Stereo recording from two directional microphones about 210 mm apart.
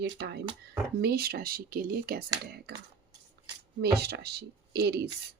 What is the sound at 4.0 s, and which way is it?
Speech, 50° right (ahead or behind).